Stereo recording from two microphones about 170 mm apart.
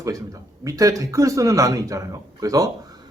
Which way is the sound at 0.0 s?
20° right (ahead or behind).